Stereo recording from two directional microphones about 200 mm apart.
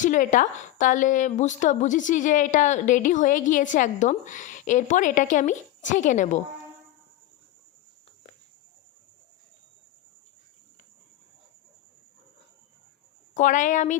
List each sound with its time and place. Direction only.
0.0 s a woman's voice: 40° left (ahead or behind)
13.3 s a woman's voice: 40° left (ahead or behind)